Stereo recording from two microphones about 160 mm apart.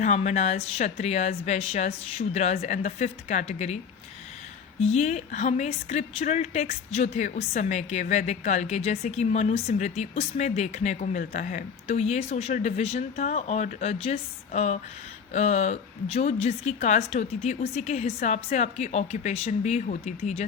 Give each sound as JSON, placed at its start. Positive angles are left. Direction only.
{"t": 0.0, "sound": "speech", "side_deg": 50}
{"t": 4.8, "sound": "speech", "side_deg": 45}